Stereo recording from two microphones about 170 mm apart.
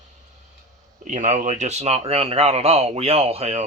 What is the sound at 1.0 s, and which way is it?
Speech, 45° right (ahead or behind).